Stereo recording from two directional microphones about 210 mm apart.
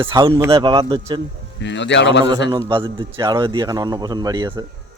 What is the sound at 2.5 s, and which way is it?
Speech, 20° right (ahead or behind).